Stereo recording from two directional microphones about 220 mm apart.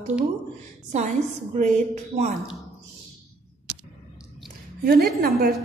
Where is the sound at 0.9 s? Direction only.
35° right (ahead or behind).